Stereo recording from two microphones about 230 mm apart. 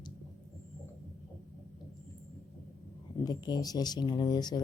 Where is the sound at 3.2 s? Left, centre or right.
Centre.